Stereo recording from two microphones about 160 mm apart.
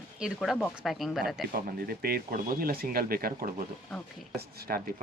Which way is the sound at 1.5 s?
65° right (ahead or behind).